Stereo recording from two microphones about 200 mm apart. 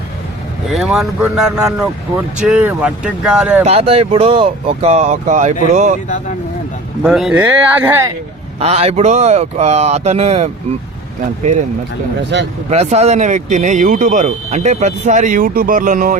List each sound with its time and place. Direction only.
0.7 s speech: centre (ahead or behind)
3.6 s speech: 30° right (ahead or behind)
7.0 s speech: centre (ahead or behind)
8.5 s speech: 30° right (ahead or behind)
12.7 s speech: 35° right (ahead or behind)